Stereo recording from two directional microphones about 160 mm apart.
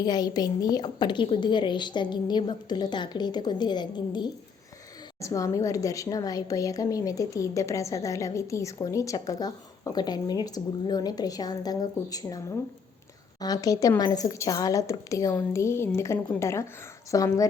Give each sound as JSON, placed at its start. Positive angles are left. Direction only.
{"t": 0.0, "sound": "a woman's voice", "side_deg": 25}